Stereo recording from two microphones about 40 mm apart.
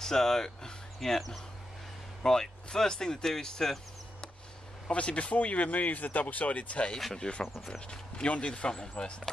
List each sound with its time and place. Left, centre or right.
0.0 s speech: centre
4.8 s speech: left
7.2 s speech: left